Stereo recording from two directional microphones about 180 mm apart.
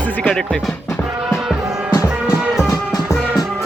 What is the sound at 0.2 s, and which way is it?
Speech, 5° left (ahead or behind).